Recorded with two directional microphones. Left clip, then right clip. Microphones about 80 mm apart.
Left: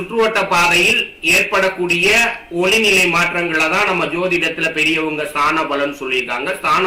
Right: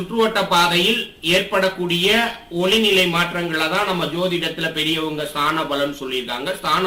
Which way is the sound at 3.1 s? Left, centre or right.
Centre.